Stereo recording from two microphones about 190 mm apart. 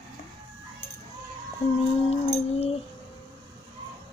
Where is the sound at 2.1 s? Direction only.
30° left (ahead or behind).